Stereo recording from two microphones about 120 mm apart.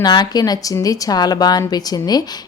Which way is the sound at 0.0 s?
35° left (ahead or behind).